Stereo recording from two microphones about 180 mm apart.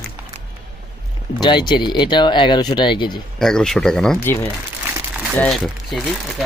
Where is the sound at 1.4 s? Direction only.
25° left (ahead or behind).